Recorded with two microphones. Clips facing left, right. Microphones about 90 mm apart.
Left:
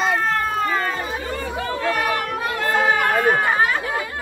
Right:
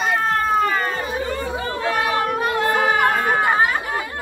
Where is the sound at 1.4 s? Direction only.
20° right (ahead or behind).